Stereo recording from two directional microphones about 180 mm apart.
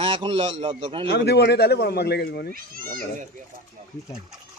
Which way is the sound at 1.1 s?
65° left (ahead or behind).